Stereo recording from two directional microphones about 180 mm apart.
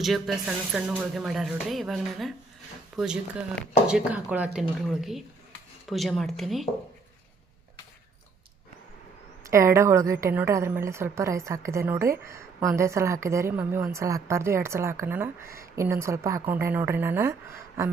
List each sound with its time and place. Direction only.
0.0 s a woman's voice: centre (ahead or behind)
9.4 s a woman's voice: 15° right (ahead or behind)